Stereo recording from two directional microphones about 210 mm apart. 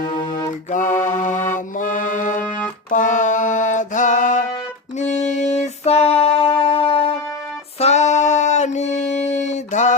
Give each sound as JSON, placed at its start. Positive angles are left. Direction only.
{"t": 0.0, "sound": "mantra", "side_deg": 20}
{"t": 0.7, "sound": "mantra", "side_deg": 40}
{"t": 4.9, "sound": "music", "side_deg": 35}
{"t": 7.8, "sound": "a sound", "side_deg": 30}